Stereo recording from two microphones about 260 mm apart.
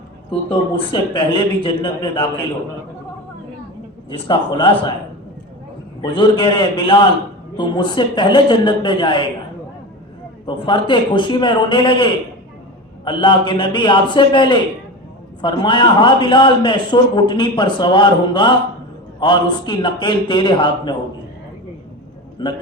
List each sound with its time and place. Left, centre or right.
0.9 s a man's voice: centre
4.1 s a man's voice: centre
6.0 s a man's voice: centre
10.4 s a man's voice: centre
22.4 s a man's voice: centre